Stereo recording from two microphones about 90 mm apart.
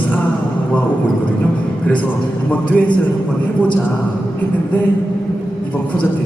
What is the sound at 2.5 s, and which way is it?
Speech, 15° left (ahead or behind).